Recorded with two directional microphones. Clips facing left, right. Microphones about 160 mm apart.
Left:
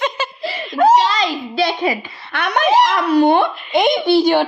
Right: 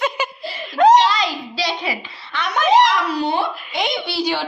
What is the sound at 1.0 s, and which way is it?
Giggle, 45° left (ahead or behind).